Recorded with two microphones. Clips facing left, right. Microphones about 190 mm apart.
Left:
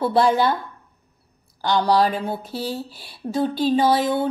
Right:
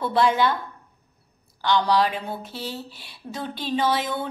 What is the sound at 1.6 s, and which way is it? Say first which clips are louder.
A woman's voice: left 2 dB; 40° left (ahead or behind).